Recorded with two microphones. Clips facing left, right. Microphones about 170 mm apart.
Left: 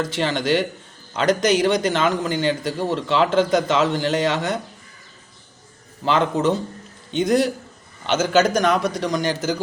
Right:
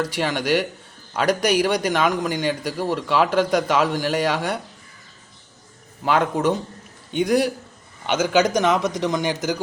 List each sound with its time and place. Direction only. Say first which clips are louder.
0.0 s a man's voice: left 1 dB; 10° right (ahead or behind)
6.1 s a man's voice: left 1 dB; 10° right (ahead or behind)